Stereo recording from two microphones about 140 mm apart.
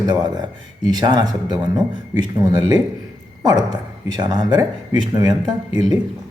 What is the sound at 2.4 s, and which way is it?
Speech, 30° right (ahead or behind).